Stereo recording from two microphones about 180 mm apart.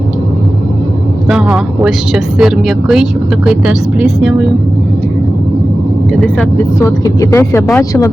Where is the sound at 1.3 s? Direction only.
5° right (ahead or behind).